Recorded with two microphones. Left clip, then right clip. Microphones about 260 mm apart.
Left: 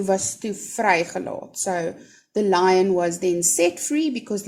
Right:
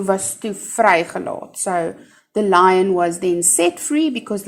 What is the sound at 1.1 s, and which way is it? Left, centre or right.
Speech, right.